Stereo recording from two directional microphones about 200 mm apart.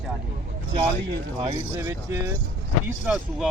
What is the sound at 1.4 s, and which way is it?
Speech, 15° right (ahead or behind).